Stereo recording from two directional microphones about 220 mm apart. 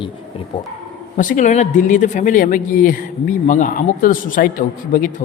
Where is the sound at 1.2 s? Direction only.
40° left (ahead or behind).